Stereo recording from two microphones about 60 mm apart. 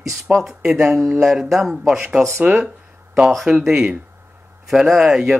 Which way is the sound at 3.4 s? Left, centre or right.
Centre.